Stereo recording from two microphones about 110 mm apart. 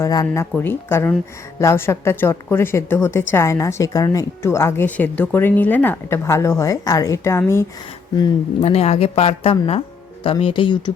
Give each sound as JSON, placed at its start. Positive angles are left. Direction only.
{"t": 0.0, "sound": "a woman's voice", "side_deg": 30}
{"t": 0.5, "sound": "a woman's voice", "side_deg": 15}
{"t": 4.9, "sound": "a woman's voice", "side_deg": 15}
{"t": 8.6, "sound": "speech", "side_deg": 70}